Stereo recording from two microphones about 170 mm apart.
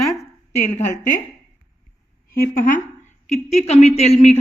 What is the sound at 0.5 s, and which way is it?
Speech, 45° left (ahead or behind).